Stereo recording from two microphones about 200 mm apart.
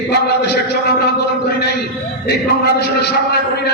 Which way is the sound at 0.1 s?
55° left (ahead or behind).